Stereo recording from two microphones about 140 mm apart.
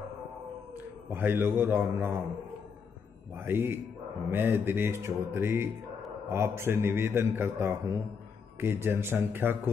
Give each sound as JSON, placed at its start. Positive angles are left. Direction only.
{"t": 1.1, "sound": "music", "side_deg": -15}
{"t": 3.3, "sound": "music", "side_deg": -15}
{"t": 6.2, "sound": "a man's voice", "side_deg": -20}
{"t": 8.5, "sound": "music", "side_deg": -15}